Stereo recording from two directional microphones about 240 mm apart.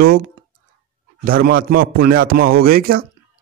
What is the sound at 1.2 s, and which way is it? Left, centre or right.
A man's voice, right.